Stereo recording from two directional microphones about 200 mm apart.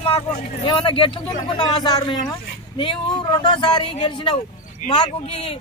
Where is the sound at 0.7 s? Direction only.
25° left (ahead or behind).